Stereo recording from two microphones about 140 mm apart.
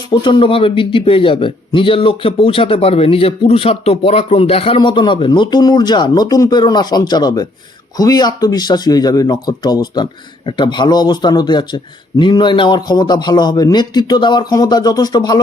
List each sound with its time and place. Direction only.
0.1 s a man's voice: 35° left (ahead or behind)